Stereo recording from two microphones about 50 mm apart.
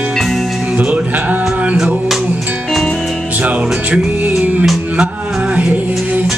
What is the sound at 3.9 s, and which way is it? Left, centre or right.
Music, right.